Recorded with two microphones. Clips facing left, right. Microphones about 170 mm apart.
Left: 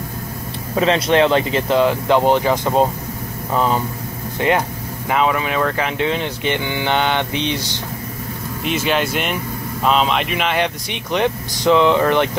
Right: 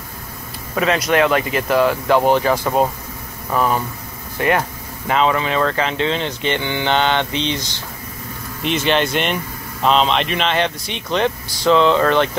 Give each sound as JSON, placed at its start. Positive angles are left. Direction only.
{"t": 0.7, "sound": "speech", "side_deg": 30}
{"t": 8.6, "sound": "speech", "side_deg": 5}